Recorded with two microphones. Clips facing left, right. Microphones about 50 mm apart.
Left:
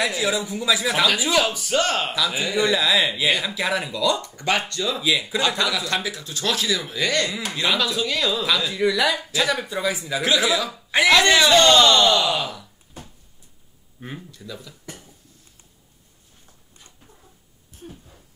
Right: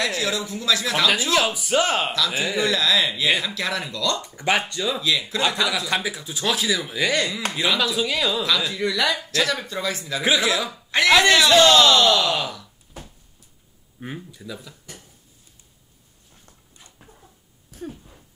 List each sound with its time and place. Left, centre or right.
0.0 s a woman's voice: centre
2.1 s a woman's voice: centre
4.4 s speech: centre
5.5 s speech: centre
5.9 s speech: centre
10.4 s speech: centre
10.7 s a man's voice: centre
11.1 s speech: centre
13.9 s speech: centre
17.6 s a sound: right